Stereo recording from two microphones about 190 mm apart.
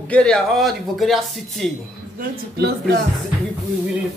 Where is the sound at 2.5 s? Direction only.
60° right (ahead or behind).